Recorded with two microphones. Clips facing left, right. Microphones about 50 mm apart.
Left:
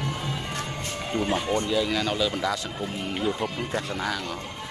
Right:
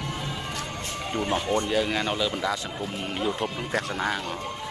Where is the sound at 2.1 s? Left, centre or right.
Centre.